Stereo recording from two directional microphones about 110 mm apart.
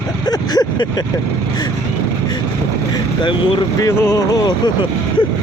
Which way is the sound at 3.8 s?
30° left (ahead or behind).